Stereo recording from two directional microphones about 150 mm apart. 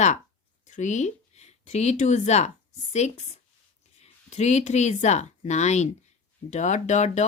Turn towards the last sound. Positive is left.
turn(degrees=50)  # may be behind; listen again after turning